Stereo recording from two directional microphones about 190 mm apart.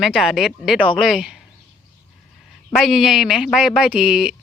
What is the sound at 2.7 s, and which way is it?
Speech, centre (ahead or behind).